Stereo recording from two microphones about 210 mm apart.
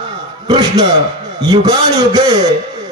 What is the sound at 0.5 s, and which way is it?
A man's voice, 20° right (ahead or behind).